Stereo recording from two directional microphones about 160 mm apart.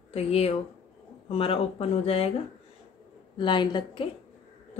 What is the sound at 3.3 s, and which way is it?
Speech, 30° left (ahead or behind).